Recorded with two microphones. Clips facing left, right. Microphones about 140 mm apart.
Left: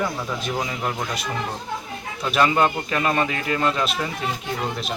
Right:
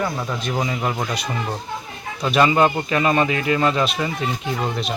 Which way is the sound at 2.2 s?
5° right (ahead or behind).